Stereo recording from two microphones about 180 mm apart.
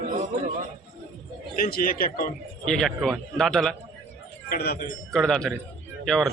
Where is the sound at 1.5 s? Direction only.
55° left (ahead or behind).